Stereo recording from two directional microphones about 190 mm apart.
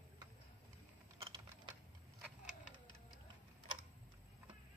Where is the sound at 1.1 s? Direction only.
25° right (ahead or behind).